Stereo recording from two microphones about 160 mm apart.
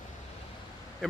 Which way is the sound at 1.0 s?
5° left (ahead or behind).